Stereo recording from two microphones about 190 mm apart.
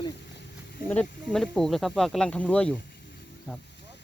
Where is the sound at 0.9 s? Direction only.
5° left (ahead or behind).